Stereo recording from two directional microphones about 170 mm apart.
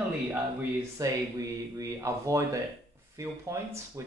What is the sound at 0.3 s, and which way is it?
Speech, 15° right (ahead or behind).